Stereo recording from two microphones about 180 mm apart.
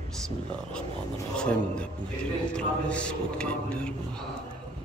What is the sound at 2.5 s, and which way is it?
A man's voice, 5° left (ahead or behind).